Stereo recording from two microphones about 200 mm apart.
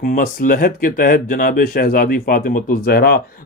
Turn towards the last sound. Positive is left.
turn(degrees=50)  # may be behind; listen again after turning